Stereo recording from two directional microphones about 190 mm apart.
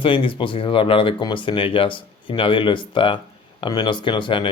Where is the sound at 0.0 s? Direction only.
25° left (ahead or behind).